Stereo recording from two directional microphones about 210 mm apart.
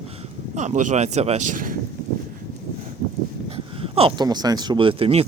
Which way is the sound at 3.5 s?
25° right (ahead or behind).